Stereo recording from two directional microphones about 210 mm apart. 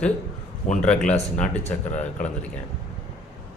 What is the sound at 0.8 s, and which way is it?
Speech, 5° left (ahead or behind).